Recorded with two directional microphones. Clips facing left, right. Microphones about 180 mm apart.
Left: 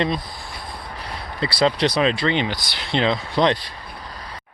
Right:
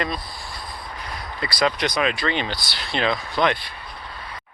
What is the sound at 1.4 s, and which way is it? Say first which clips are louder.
Speech: left 4 dB; 25° left (ahead or behind).